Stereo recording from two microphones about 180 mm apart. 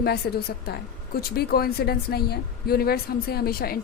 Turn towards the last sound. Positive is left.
turn(degrees=55)  # may be behind; listen again after turning